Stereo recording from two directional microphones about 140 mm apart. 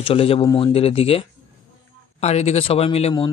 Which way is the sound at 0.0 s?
40° left (ahead or behind).